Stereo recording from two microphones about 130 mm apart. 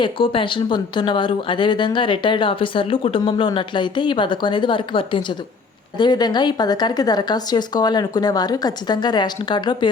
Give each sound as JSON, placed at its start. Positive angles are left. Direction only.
{"t": 0.0, "sound": "speech", "side_deg": 40}